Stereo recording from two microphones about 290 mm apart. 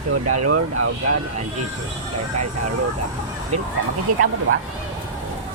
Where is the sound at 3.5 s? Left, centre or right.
Right.